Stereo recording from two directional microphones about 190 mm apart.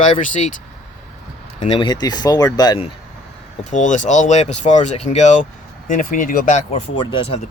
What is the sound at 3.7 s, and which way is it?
Speech, 40° left (ahead or behind).